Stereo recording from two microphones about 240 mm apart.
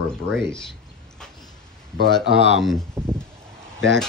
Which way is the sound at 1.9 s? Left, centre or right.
Right.